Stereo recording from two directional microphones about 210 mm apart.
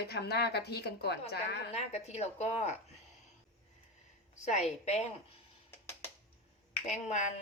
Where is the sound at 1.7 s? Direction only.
30° left (ahead or behind).